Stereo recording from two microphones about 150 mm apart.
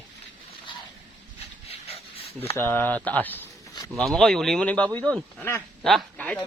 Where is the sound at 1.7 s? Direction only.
40° left (ahead or behind).